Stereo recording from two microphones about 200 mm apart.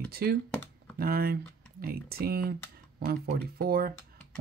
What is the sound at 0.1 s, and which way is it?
Speech, 50° right (ahead or behind).